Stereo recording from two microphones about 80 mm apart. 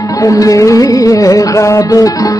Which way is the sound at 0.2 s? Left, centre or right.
Left.